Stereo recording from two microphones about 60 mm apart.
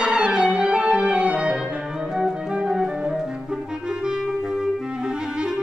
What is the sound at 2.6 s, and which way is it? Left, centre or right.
Music, centre.